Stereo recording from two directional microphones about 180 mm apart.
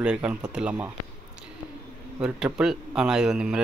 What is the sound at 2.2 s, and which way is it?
Speech, 5° right (ahead or behind).